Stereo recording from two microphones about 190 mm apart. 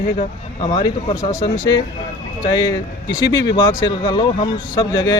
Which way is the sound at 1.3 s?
20° left (ahead or behind).